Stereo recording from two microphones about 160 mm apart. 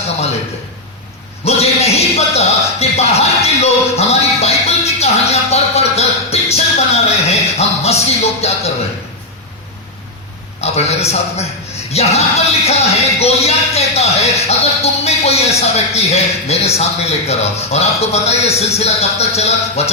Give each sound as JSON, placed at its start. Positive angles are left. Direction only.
{"t": 1.5, "sound": "a sound", "side_deg": 40}
{"t": 4.9, "sound": "music", "side_deg": 40}
{"t": 10.6, "sound": "a man's voice", "side_deg": 40}